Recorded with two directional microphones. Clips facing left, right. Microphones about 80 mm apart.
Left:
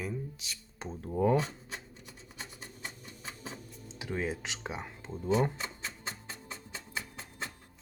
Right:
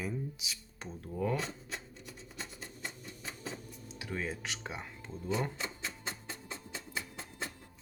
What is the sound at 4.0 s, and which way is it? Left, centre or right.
Speech, centre.